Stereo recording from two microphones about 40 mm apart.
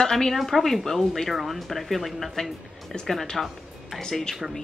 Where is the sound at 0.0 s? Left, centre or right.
Centre.